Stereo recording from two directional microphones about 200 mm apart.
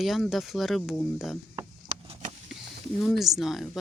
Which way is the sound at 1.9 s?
35° right (ahead or behind).